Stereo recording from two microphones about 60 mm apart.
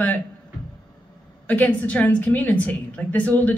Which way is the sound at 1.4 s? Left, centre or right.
Left.